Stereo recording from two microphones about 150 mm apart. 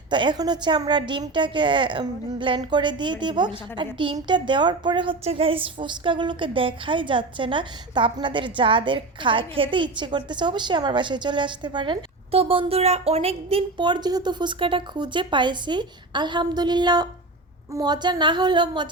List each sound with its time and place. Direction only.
0.1 s a woman's voice: 30° right (ahead or behind)